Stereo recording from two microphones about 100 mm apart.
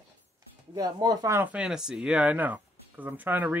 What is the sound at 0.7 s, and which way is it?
Speech, 40° right (ahead or behind).